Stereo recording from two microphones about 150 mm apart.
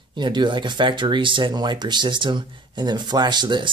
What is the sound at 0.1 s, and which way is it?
Speech, 30° right (ahead or behind).